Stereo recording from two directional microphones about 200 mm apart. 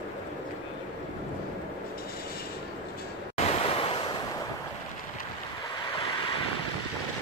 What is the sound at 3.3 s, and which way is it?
Waves, 30° left (ahead or behind).